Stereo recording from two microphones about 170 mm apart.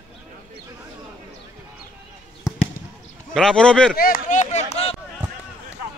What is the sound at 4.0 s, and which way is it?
Speech, 50° left (ahead or behind).